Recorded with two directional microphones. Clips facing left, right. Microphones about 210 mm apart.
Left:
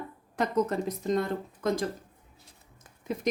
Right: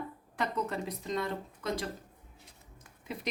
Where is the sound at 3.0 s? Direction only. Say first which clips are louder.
Left 7 dB; 45° left (ahead or behind).